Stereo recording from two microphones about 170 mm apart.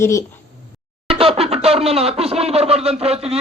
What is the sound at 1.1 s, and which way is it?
Speech, 35° right (ahead or behind).